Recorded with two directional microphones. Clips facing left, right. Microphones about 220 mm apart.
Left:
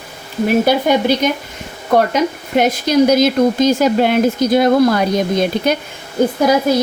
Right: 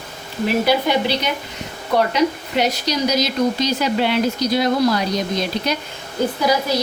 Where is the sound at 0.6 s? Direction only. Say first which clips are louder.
Left 4 dB; 50° left (ahead or behind).